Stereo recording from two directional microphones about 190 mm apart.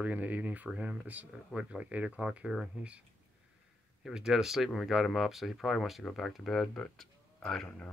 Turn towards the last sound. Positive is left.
turn(degrees=5)  # may be behind; listen again after turning